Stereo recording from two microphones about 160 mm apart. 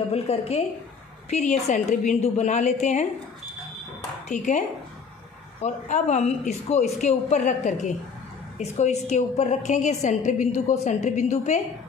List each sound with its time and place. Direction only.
0.1 s a woman's voice: 40° left (ahead or behind)
4.3 s a woman's voice: 50° left (ahead or behind)